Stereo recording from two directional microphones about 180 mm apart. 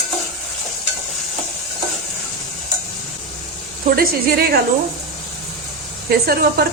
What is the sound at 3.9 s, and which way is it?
Speech, 55° right (ahead or behind).